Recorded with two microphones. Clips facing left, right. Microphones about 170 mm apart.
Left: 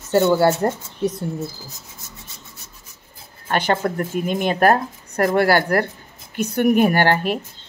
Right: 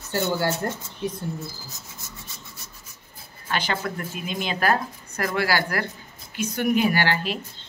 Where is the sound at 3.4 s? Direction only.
50° left (ahead or behind).